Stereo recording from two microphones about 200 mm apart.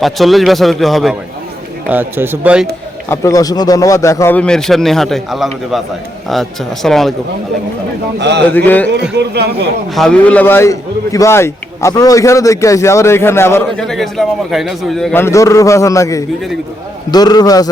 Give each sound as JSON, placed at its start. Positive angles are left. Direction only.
{"t": 0.0, "sound": "a man's voice", "side_deg": 0}
{"t": 1.9, "sound": "a man's voice", "side_deg": -10}
{"t": 3.1, "sound": "a man's voice", "side_deg": 15}
{"t": 8.4, "sound": "a man's voice", "side_deg": 10}
{"t": 8.9, "sound": "speech", "side_deg": -55}
{"t": 9.9, "sound": "a man's voice", "side_deg": 5}